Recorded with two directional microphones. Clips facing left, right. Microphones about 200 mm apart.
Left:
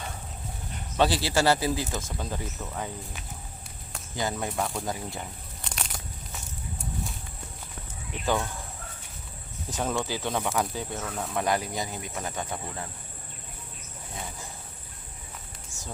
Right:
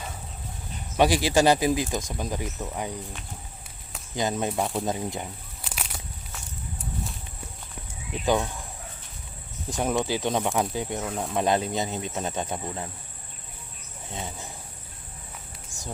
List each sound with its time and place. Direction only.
0.9 s speech: 15° right (ahead or behind)
4.1 s speech: 20° right (ahead or behind)
5.6 s crumpling: 5° right (ahead or behind)
8.2 s speech: 15° right (ahead or behind)
9.6 s speech: 15° right (ahead or behind)